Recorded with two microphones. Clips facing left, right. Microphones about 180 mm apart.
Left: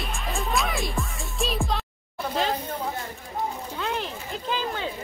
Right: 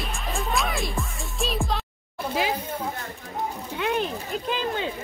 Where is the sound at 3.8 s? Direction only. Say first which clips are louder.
Right 5 dB; 15° right (ahead or behind).